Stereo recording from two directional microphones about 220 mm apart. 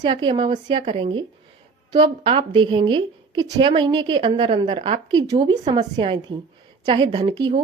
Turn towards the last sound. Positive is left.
turn(degrees=-20)  # may be behind; listen again after turning